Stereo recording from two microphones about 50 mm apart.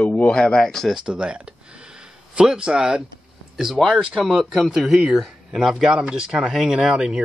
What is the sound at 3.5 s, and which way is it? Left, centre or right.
Speech, centre.